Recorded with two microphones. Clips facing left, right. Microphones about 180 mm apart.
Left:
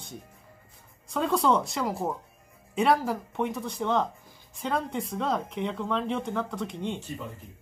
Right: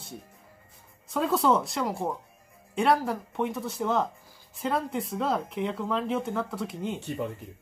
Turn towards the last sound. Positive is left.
turn(degrees=-5)  # may be behind; listen again after turning